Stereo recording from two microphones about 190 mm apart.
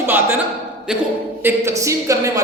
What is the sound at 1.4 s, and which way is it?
A man's voice, 15° right (ahead or behind).